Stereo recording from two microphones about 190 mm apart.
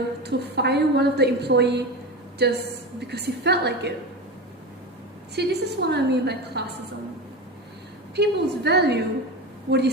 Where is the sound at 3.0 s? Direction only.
60° right (ahead or behind).